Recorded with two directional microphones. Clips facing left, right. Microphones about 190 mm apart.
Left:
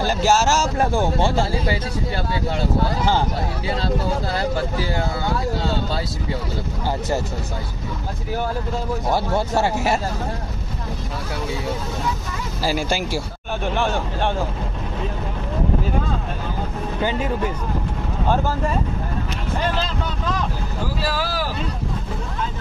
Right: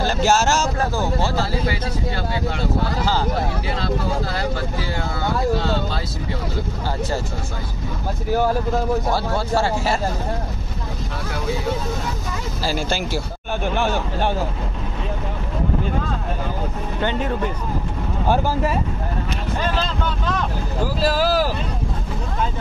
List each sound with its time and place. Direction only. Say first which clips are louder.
0.2 s speech: even; 5° left (ahead or behind)
0.7 s speech: left 2 dB; 25° left (ahead or behind)
9.1 s speech: left 1 dB; 20° left (ahead or behind)
12.7 s speech: even; 10° left (ahead or behind)
13.7 s speech: even; centre (ahead or behind)
17.0 s speech: even; 10° left (ahead or behind)
18.3 s speech: right 2 dB; 10° right (ahead or behind)
21.0 s speech: right 8 dB; 40° right (ahead or behind)